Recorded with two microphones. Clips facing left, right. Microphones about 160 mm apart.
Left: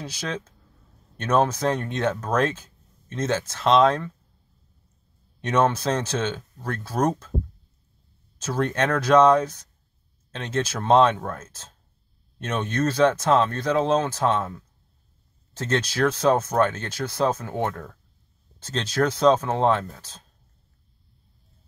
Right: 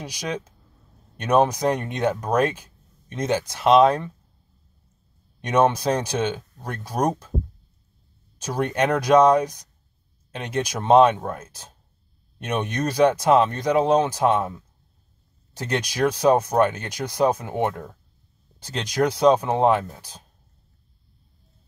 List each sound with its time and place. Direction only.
0.0 s speech: 15° right (ahead or behind)
5.4 s speech: 10° right (ahead or behind)
8.4 s speech: 15° right (ahead or behind)
15.5 s speech: 15° right (ahead or behind)